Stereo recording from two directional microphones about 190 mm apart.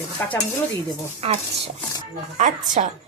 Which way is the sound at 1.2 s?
35° right (ahead or behind).